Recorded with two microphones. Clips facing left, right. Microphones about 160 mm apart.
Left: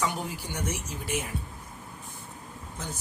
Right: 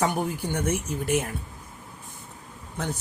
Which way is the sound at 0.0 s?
55° right (ahead or behind).